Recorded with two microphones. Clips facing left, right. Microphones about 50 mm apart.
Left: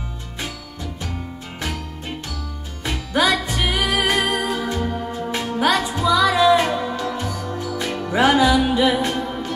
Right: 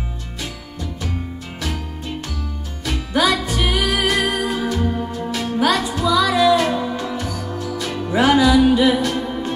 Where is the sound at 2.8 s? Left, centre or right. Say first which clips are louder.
Right 1 dB; left.